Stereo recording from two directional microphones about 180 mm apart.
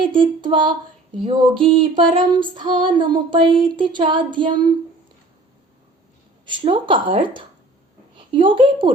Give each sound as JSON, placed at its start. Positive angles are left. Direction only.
{"t": 0.1, "sound": "female singing", "side_deg": -25}
{"t": 6.4, "sound": "female singing", "side_deg": -25}